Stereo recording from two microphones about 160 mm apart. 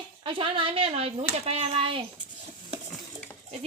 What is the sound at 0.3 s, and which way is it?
Speech, 35° right (ahead or behind).